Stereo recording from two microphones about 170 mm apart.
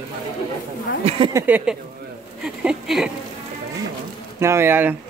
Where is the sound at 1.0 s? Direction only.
35° right (ahead or behind).